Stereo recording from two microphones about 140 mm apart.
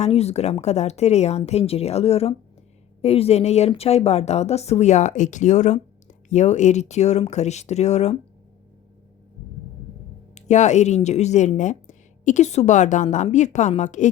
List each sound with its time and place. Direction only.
0.0 s a woman's voice: 50° left (ahead or behind)
10.3 s speech: 55° left (ahead or behind)